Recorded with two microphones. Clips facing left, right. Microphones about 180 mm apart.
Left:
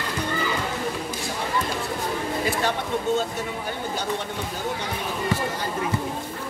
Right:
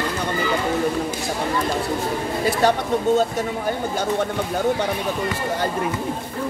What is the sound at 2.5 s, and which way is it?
Speech, 40° right (ahead or behind).